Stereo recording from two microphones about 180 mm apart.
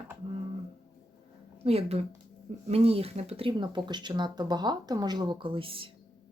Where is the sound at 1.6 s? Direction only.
35° right (ahead or behind).